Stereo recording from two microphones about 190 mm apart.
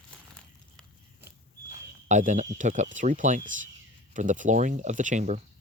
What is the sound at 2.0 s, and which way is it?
Speech, 40° right (ahead or behind).